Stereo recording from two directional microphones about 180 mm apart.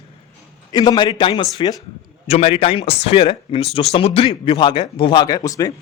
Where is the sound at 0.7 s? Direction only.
25° left (ahead or behind).